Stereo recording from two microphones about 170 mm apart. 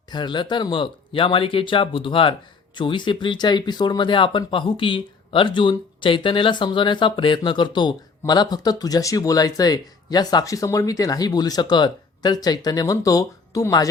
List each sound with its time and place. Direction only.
0.1 s speech: 25° left (ahead or behind)